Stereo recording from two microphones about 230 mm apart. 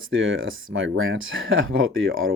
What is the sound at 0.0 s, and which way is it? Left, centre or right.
Speech, right.